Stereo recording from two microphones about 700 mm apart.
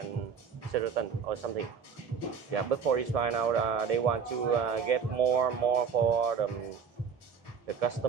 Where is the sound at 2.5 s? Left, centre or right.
Right.